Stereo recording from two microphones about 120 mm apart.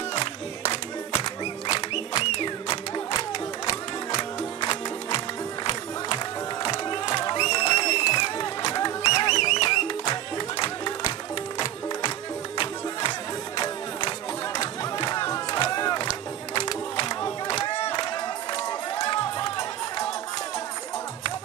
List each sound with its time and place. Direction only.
1.2 s music: 35° left (ahead or behind)
3.7 s music: 30° left (ahead or behind)
6.6 s a sound: 40° left (ahead or behind)
9.1 s music: 30° left (ahead or behind)
12.5 s music: 45° left (ahead or behind)
14.6 s music: 30° left (ahead or behind)
15.8 s crowd: 35° left (ahead or behind)
16.6 s music: 35° left (ahead or behind)
17.5 s crowd: 35° left (ahead or behind)
17.7 s a sound: 50° left (ahead or behind)
18.0 s run: 35° left (ahead or behind)